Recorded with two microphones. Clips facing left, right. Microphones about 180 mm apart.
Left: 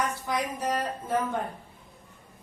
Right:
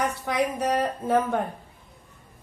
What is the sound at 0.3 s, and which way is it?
A woman's voice, 65° right (ahead or behind).